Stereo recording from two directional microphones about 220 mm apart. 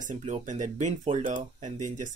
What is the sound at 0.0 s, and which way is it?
Speech, 35° right (ahead or behind).